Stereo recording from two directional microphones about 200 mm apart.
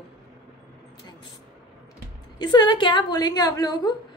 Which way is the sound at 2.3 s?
20° left (ahead or behind).